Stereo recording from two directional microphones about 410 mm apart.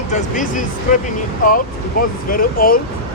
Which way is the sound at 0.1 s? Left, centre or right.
Centre.